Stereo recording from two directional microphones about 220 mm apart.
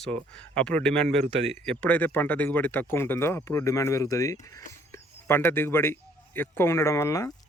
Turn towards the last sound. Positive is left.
turn(degrees=15)  # may be behind; listen again after turning